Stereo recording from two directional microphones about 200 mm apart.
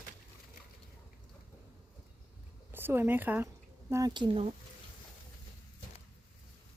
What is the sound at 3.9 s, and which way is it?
Speech, 20° right (ahead or behind).